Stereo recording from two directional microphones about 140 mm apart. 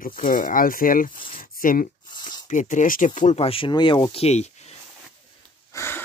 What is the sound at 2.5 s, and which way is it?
Speech, 65° left (ahead or behind).